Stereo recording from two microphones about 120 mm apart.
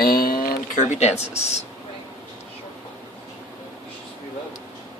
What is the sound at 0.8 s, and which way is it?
Speech, 75° left (ahead or behind).